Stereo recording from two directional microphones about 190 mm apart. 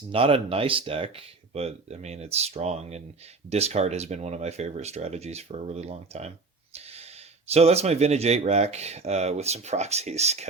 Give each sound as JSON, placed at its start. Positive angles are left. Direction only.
{"t": 0.1, "sound": "speech", "side_deg": -30}